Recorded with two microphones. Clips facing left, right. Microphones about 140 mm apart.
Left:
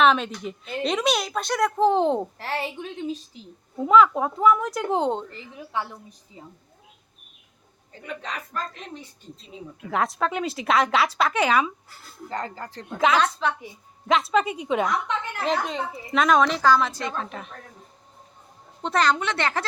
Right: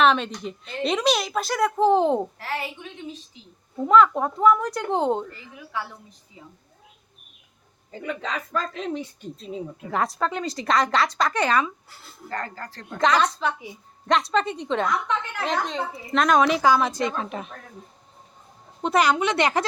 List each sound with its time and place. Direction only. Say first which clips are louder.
0.0 s a woman's voice: even; centre (ahead or behind)
2.4 s a woman's voice: left 2 dB; 30° left (ahead or behind)
3.8 s a woman's voice: even; centre (ahead or behind)
5.7 s speech: left 2 dB; 20° left (ahead or behind)
6.4 s a woman's voice: left 2 dB; 35° left (ahead or behind)
8.5 s speech: right 6 dB; 90° right
9.9 s a woman's voice: left 1 dB; centre (ahead or behind)
11.9 s speech: even; 10° right (ahead or behind)
12.3 s speech: left 1 dB; 20° left (ahead or behind)
12.9 s a woman's voice: even; 5° left (ahead or behind)
16.5 s a woman's voice: right 1 dB; 10° right (ahead or behind)
18.8 s a woman's voice: right 2 dB; 10° right (ahead or behind)